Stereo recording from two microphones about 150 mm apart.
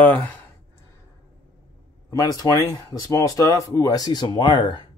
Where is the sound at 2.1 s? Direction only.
25° left (ahead or behind).